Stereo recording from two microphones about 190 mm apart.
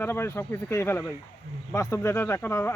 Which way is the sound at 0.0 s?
10° left (ahead or behind).